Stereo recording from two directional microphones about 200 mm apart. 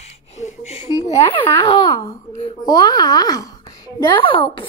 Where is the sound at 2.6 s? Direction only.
20° left (ahead or behind).